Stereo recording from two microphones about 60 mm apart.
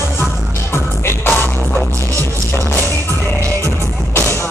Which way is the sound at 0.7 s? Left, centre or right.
Left.